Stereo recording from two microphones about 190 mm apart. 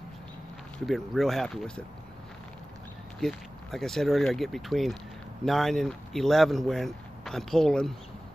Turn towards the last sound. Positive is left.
turn(degrees=0)  # may be behind; listen again after turning